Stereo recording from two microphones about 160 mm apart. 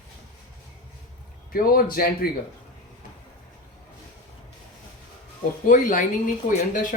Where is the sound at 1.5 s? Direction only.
65° left (ahead or behind).